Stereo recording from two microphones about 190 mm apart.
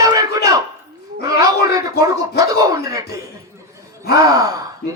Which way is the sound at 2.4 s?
20° right (ahead or behind).